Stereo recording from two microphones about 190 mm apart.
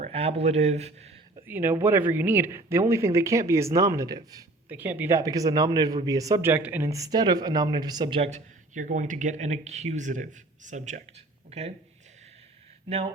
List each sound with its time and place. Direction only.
0.0 s speech: 30° right (ahead or behind)
1.5 s speech: 10° right (ahead or behind); by 11.0 s 40° right (ahead or behind)